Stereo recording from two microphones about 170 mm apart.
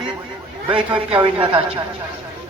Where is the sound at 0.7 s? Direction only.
30° right (ahead or behind).